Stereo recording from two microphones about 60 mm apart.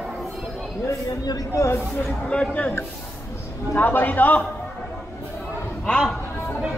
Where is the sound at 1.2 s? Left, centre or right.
Left.